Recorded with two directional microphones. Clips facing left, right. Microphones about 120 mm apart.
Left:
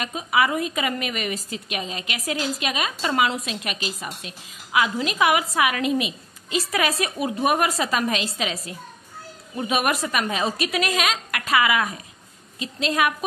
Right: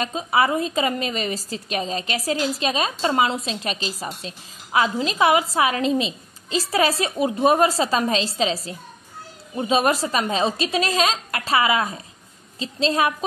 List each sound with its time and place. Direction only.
0.0 s a woman's voice: 30° right (ahead or behind)
9.6 s a woman's voice: 25° right (ahead or behind)